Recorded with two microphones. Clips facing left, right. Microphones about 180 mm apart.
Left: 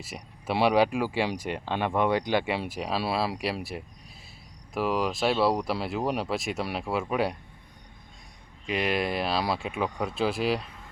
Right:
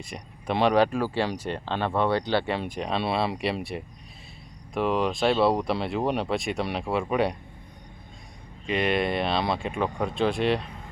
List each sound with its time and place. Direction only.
0.0 s speech: 5° left (ahead or behind)
8.6 s speech: centre (ahead or behind)